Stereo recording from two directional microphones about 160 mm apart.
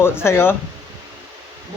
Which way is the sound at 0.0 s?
15° left (ahead or behind).